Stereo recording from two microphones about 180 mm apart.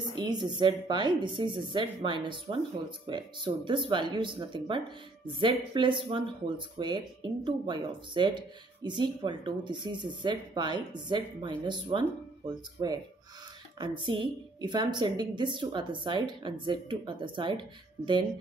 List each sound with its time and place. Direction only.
0.1 s speech: 25° right (ahead or behind)